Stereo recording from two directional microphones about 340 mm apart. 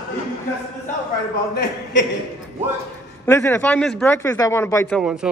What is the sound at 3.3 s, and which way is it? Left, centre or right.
A man's voice, centre.